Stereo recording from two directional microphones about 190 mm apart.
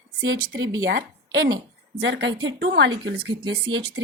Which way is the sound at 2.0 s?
65° right (ahead or behind).